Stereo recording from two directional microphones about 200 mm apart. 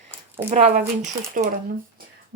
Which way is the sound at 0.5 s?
40° right (ahead or behind).